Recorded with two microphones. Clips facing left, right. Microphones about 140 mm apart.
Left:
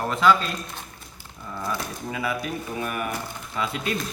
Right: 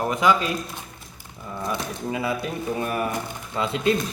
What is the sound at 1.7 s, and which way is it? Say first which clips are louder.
A man's voice: right 4 dB; 25° right (ahead or behind).